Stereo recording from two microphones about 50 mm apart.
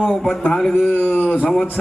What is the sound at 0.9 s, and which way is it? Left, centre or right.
Speech, left.